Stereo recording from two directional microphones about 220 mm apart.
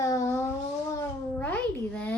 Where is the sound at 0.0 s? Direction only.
15° left (ahead or behind).